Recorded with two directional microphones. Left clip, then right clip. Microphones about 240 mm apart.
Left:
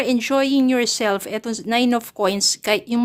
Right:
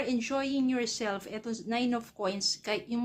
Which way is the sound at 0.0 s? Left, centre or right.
Left.